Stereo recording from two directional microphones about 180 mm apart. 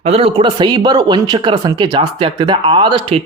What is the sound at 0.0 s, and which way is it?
A man's voice, 35° right (ahead or behind).